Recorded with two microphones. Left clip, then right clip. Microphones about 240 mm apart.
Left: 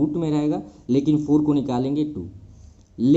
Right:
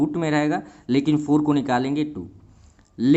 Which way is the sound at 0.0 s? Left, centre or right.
Right.